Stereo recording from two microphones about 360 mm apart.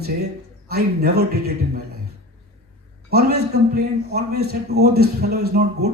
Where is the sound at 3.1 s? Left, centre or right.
Right.